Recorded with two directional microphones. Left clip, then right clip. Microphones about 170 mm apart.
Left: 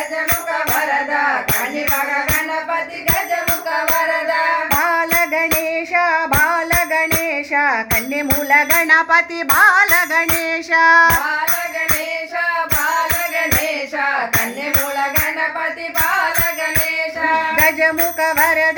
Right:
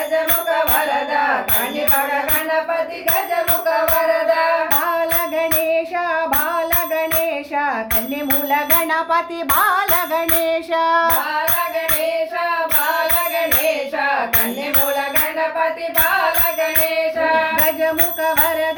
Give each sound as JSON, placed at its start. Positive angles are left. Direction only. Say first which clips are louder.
{"t": 4.9, "sound": "music", "louder": "left 3 dB", "side_deg": 30}
{"t": 7.5, "sound": "tambourine", "louder": "left 6 dB", "side_deg": 30}
{"t": 8.4, "sound": "music", "louder": "left 6 dB", "side_deg": 20}
{"t": 10.5, "sound": "child singing", "louder": "left 7 dB", "side_deg": 20}